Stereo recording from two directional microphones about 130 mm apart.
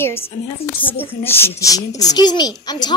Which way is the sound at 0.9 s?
15° left (ahead or behind).